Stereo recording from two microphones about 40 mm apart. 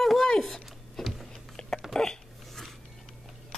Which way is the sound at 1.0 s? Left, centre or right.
Centre.